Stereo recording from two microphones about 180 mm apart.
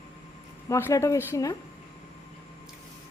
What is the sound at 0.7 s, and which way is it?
Speech, 15° left (ahead or behind).